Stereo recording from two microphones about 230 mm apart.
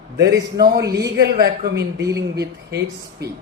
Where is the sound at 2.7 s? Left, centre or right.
Right.